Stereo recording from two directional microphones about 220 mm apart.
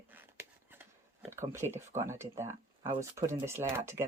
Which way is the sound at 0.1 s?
10° right (ahead or behind).